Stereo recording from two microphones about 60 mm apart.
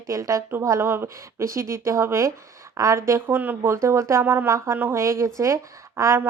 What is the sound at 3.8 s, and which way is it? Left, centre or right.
A woman's voice, right.